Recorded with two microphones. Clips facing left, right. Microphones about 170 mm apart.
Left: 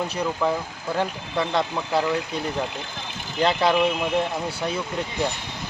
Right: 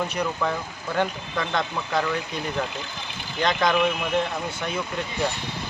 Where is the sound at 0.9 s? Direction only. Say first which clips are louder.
Even; 30° left (ahead or behind).